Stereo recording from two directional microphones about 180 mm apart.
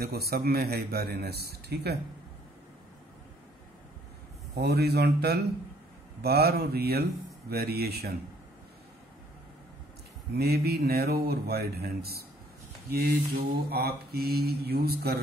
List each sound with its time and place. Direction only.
0.0 s speech: 60° right (ahead or behind)
4.6 s speech: 65° right (ahead or behind)
10.3 s speech: 60° right (ahead or behind)
13.7 s speech: 60° right (ahead or behind)